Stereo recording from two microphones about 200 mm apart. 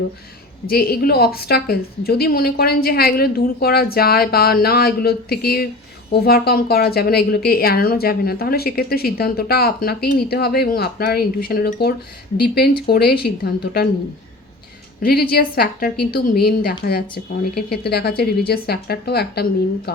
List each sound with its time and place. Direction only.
0.7 s a woman's voice: 50° left (ahead or behind)
15.0 s a woman's voice: 50° left (ahead or behind)